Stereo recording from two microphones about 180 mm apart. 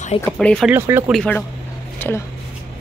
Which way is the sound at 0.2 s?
5° left (ahead or behind).